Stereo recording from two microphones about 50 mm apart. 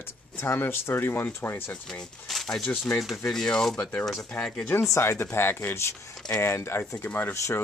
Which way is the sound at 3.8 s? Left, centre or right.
Left.